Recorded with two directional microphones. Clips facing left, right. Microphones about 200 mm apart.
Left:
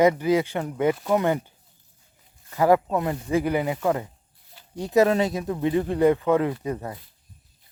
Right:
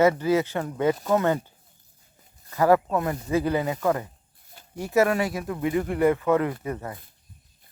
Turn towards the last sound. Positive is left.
turn(degrees=15)  # may be behind; listen again after turning